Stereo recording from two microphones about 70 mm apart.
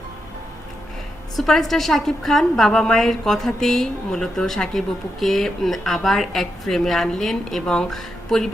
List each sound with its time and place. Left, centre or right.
1.4 s a woman's voice: centre